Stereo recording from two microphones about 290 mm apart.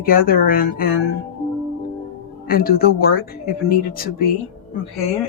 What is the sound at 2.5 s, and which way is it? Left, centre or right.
Speech, left.